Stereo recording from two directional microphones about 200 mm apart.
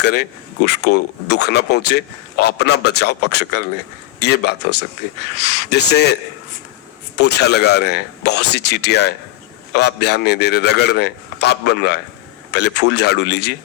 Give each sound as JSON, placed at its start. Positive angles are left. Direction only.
{"t": 0.0, "sound": "speech", "side_deg": 55}
{"t": 7.2, "sound": "speech", "side_deg": 55}